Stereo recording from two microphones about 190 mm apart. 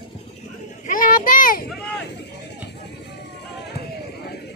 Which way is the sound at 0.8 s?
45° left (ahead or behind).